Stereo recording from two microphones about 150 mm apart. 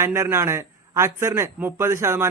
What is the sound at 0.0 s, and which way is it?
A man's voice, 20° right (ahead or behind).